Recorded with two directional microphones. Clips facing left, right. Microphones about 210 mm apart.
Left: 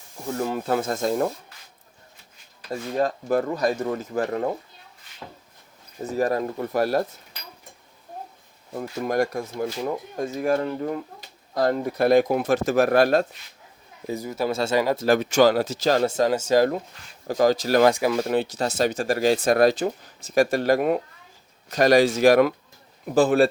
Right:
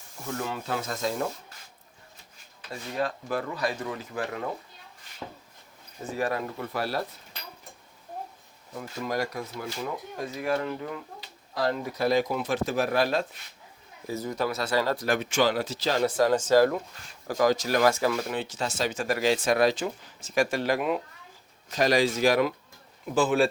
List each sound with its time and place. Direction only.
0.3 s speech: 45° left (ahead or behind)
2.6 s speech: 40° left (ahead or behind)
6.1 s speech: 40° left (ahead or behind)
8.8 s speech: 50° left (ahead or behind)
12.7 s speech: 70° left (ahead or behind)
13.0 s speech: 50° left (ahead or behind)
14.1 s speech: 10° left (ahead or behind)
14.4 s speech: 25° left (ahead or behind); by 16.0 s 45° left (ahead or behind)
16.0 s speech: 25° left (ahead or behind)
16.3 s speech: 10° left (ahead or behind)
16.6 s speech: 25° left (ahead or behind); by 22.5 s 55° left (ahead or behind)
23.1 s speech: 40° left (ahead or behind)